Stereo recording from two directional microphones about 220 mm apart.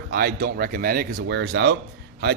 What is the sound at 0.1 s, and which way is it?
Speech, 45° right (ahead or behind).